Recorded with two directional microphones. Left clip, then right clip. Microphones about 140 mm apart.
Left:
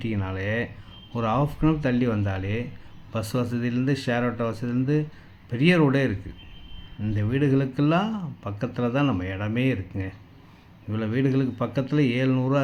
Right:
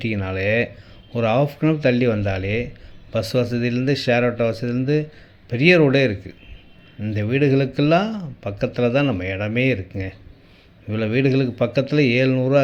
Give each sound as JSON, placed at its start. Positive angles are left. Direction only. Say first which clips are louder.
{"t": 0.0, "sound": "speech", "louder": "right 7 dB", "side_deg": -15}